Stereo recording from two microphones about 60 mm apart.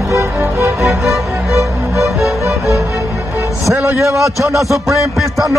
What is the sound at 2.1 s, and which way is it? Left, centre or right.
Music, centre.